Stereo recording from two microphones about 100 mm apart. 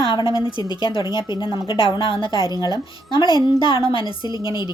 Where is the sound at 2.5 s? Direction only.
45° left (ahead or behind).